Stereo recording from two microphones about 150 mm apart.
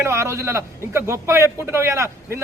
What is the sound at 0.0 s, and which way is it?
A man's voice, 20° right (ahead or behind).